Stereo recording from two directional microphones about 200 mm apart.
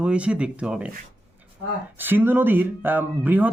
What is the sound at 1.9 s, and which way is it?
Speech, 10° right (ahead or behind).